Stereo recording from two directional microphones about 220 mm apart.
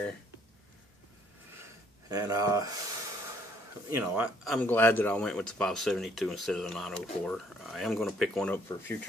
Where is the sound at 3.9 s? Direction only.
5° right (ahead or behind).